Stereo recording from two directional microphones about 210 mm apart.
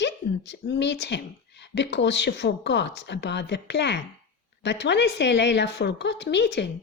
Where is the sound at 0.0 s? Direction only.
55° left (ahead or behind).